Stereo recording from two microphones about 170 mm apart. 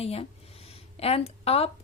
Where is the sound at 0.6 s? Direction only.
35° left (ahead or behind).